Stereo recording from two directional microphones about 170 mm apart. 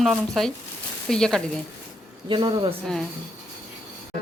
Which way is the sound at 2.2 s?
30° right (ahead or behind).